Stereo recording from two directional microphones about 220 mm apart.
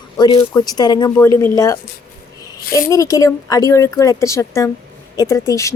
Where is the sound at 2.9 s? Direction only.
15° left (ahead or behind).